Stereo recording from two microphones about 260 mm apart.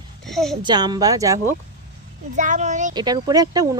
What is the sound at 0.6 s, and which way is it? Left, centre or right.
Speech, centre.